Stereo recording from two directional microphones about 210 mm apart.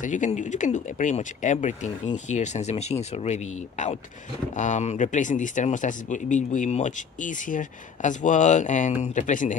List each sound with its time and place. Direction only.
0.0 s speech: 35° left (ahead or behind)
4.6 s speech: 35° left (ahead or behind)